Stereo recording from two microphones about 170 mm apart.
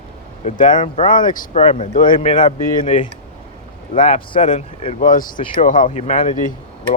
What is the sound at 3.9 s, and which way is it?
Speech, 35° left (ahead or behind).